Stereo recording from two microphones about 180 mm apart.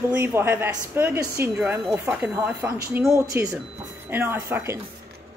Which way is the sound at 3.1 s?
20° right (ahead or behind).